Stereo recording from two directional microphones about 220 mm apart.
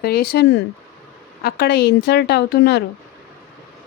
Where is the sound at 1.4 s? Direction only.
45° left (ahead or behind).